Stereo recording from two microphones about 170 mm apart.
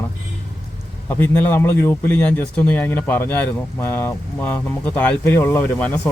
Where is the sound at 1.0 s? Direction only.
10° left (ahead or behind).